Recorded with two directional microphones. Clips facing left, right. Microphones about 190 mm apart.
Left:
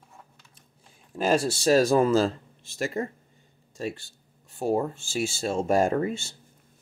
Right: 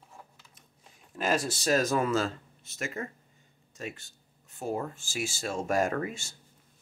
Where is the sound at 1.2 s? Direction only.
30° left (ahead or behind).